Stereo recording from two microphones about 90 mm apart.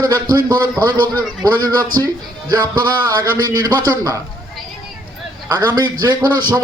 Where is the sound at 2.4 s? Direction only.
55° right (ahead or behind).